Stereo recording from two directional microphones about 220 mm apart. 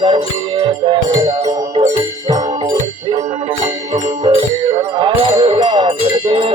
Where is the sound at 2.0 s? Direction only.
15° right (ahead or behind).